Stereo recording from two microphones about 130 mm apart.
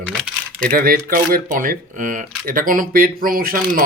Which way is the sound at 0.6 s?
90° right.